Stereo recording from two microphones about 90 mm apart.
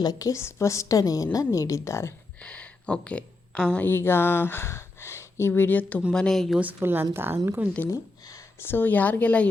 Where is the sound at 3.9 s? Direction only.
25° left (ahead or behind).